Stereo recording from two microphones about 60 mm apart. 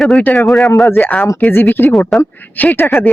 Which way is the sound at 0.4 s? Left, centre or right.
Centre.